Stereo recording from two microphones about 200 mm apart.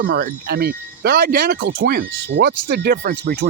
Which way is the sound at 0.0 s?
45° right (ahead or behind).